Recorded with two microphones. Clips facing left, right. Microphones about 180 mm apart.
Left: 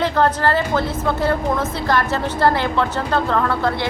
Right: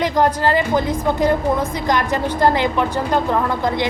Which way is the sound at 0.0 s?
15° right (ahead or behind).